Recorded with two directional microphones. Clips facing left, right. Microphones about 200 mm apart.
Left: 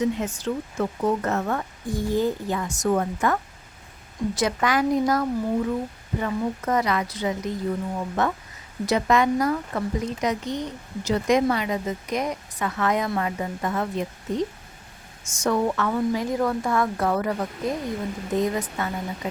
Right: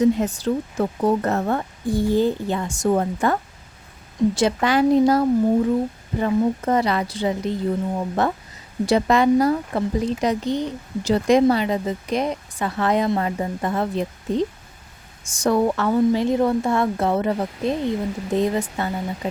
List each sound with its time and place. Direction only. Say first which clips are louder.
0.0 s speech: right 6 dB; 35° right (ahead or behind)
4.4 s speech: right 2 dB; 30° right (ahead or behind)